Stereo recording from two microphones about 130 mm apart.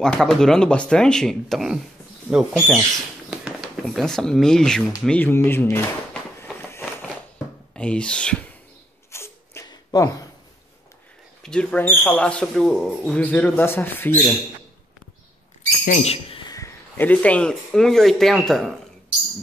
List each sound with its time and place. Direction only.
0.0 s speech: 5° left (ahead or behind)
3.8 s speech: 5° left (ahead or behind)
6.7 s a sound: 15° left (ahead or behind)
7.7 s speech: 10° left (ahead or behind)
9.1 s a sound: 20° left (ahead or behind)
11.4 s speech: 10° left (ahead or behind)
15.8 s speech: 80° left
16.1 s bird: 45° left (ahead or behind)
16.4 s a sound: 25° left (ahead or behind)
16.9 s speech: 15° left (ahead or behind)